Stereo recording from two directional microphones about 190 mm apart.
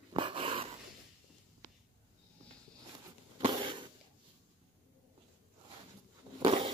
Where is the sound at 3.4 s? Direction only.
25° right (ahead or behind).